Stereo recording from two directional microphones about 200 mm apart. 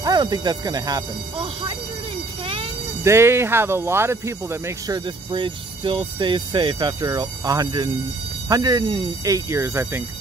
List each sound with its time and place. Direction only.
0.0 s speech: 20° right (ahead or behind)
2.4 s vehicle: 25° right (ahead or behind)
3.0 s speech: 15° right (ahead or behind)